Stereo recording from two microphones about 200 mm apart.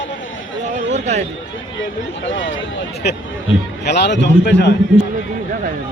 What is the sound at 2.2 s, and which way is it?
Speech, 70° left (ahead or behind).